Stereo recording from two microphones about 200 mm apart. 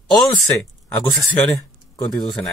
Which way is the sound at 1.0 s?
5° left (ahead or behind).